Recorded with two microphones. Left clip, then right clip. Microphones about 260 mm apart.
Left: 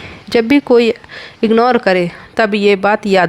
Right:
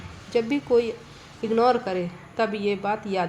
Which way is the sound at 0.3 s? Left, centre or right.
Left.